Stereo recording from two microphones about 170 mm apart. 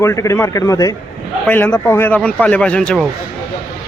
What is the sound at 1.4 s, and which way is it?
Speech, 10° left (ahead or behind).